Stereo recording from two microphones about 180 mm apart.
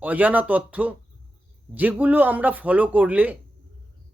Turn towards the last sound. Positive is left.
turn(degrees=-10)  # may be behind; listen again after turning